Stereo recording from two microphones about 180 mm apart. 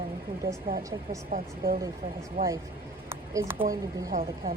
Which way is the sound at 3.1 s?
15° right (ahead or behind).